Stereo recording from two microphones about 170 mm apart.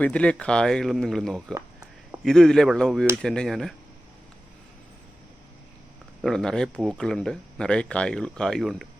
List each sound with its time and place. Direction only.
0.0 s speech: 5° left (ahead or behind)
1.5 s a sound: 15° right (ahead or behind)
2.2 s speech: 5° left (ahead or behind)
6.2 s speech: 5° left (ahead or behind)